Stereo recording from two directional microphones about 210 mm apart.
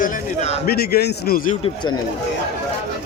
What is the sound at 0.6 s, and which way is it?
Speech, 50° left (ahead or behind).